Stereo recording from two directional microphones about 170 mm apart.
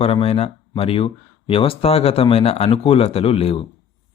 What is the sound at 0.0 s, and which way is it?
A man's voice, 35° left (ahead or behind).